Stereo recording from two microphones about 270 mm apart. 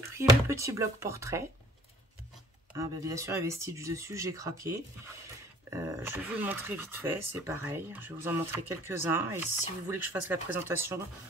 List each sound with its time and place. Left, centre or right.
0.2 s speech: centre
2.7 s speech: centre